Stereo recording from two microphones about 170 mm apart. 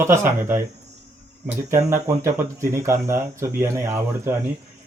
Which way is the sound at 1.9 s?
15° right (ahead or behind).